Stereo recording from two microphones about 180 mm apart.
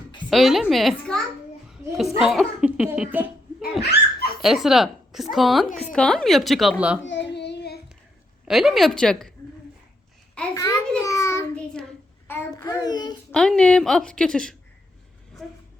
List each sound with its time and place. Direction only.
0.3 s a child's voice: centre (ahead or behind)
3.8 s dog: 60° left (ahead or behind)
4.4 s a woman's voice: centre (ahead or behind)
7.0 s child singing: 85° left; by 7.8 s 65° left (ahead or behind)
8.4 s a child's voice: centre (ahead or behind)
10.5 s a child's voice: 20° left (ahead or behind)
11.0 s child singing: 20° left (ahead or behind)
11.5 s a sound: 5° left (ahead or behind); by 13.1 s 25° left (ahead or behind)
13.3 s a child's voice: 5° left (ahead or behind)